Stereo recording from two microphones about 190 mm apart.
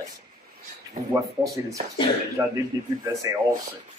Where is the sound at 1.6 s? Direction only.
15° right (ahead or behind).